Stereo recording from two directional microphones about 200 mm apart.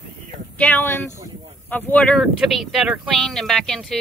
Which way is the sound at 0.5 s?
5° left (ahead or behind).